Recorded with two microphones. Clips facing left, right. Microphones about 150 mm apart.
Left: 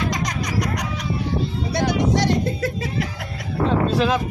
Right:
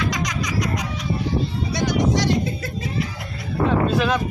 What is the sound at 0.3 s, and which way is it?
Music, 60° left (ahead or behind).